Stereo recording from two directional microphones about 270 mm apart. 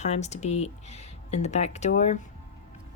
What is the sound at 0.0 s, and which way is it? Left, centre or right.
A woman's voice, left.